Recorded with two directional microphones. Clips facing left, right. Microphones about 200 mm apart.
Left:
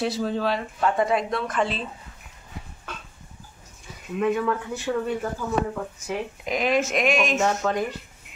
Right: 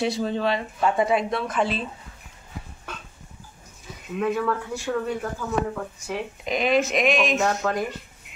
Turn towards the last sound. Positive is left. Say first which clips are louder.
# even
turn(degrees=5)  # may be behind; listen again after turning